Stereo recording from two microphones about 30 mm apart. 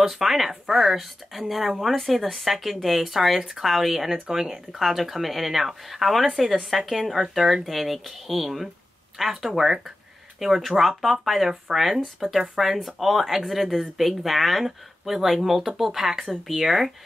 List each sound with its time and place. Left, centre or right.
0.0 s speech: centre
4.3 s speech: centre
4.7 s speech: centre
10.4 s speech: centre